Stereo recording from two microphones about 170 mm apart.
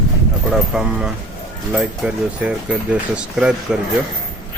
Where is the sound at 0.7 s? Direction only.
5° right (ahead or behind).